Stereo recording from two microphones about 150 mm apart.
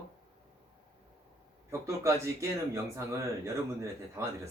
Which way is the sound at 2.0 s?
20° right (ahead or behind).